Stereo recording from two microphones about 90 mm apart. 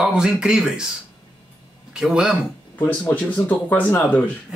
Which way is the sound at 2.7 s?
20° left (ahead or behind).